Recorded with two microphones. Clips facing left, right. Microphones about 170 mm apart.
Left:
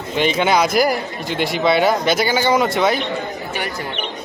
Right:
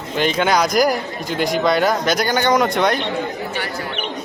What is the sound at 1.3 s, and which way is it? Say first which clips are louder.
Speech: right 2 dB; 45° right (ahead or behind).